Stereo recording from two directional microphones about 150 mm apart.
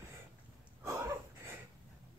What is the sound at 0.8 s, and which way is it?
Wheeze, 20° right (ahead or behind).